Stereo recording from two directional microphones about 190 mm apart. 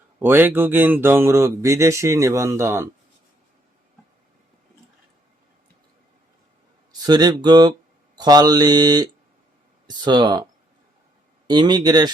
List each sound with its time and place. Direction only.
0.2 s speech: 10° right (ahead or behind)
6.9 s speech: 20° right (ahead or behind)